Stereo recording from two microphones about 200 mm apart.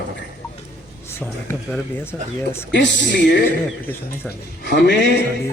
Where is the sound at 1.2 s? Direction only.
10° left (ahead or behind).